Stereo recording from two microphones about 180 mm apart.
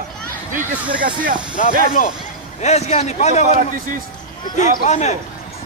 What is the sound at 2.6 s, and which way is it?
Speech, 40° left (ahead or behind).